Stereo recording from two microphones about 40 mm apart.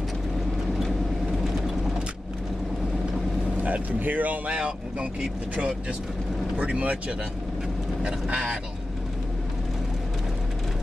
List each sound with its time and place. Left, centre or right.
3.6 s speech: right
4.5 s speech: right
6.5 s speech: right
8.0 s speech: right